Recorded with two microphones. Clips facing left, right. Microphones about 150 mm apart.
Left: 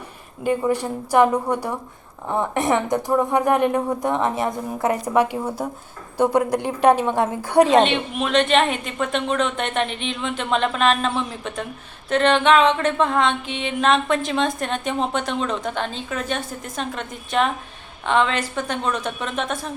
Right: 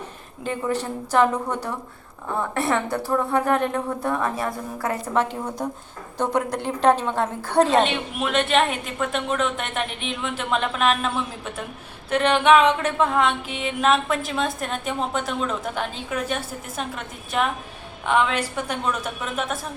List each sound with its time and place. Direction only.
0.4 s a woman's voice: 10° left (ahead or behind)
7.8 s mantra: 5° right (ahead or behind)